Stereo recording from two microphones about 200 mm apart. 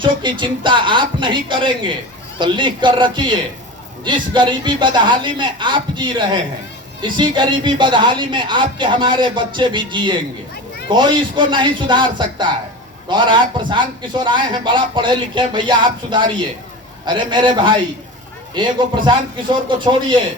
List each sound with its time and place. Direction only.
0.0 s a man's voice: 25° right (ahead or behind)